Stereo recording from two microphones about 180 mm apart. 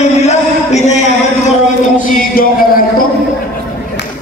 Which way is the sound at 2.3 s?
55° left (ahead or behind).